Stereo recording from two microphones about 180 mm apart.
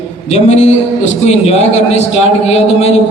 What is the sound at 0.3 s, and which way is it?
A man's voice, 35° left (ahead or behind).